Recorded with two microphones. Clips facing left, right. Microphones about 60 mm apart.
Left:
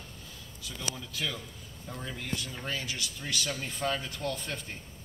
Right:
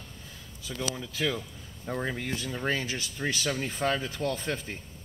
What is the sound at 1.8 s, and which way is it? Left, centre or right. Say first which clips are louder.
Speech: right 8 dB; right.